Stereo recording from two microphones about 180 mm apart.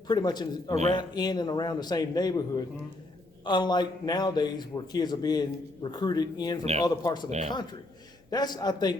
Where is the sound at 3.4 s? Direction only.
25° left (ahead or behind).